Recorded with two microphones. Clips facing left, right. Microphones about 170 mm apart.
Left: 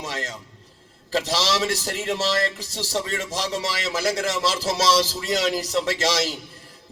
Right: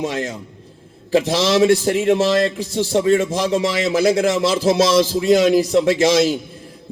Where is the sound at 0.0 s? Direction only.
55° right (ahead or behind).